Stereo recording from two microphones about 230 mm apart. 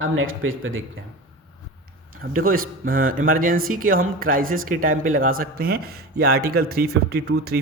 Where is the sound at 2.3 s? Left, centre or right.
Right.